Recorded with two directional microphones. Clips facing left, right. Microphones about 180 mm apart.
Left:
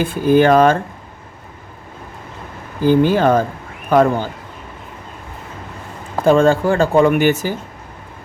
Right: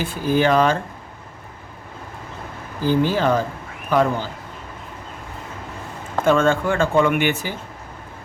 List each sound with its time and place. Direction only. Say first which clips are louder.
0.0 s speech: left 6 dB; 55° left (ahead or behind)
2.8 s speech: left 6 dB; 55° left (ahead or behind)
6.2 s speech: left 5 dB; 35° left (ahead or behind)